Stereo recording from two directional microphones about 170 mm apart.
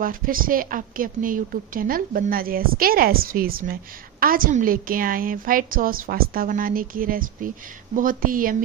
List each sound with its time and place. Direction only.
0.0 s a woman's voice: 55° right (ahead or behind)